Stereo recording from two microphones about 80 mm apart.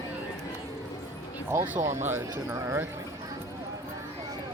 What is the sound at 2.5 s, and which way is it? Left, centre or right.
Speech, right.